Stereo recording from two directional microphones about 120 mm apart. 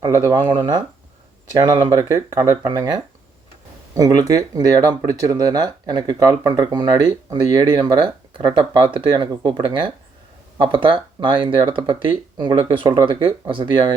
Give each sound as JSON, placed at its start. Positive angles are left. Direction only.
{"t": 0.0, "sound": "speech", "side_deg": -25}
{"t": 0.3, "sound": "speech", "side_deg": -40}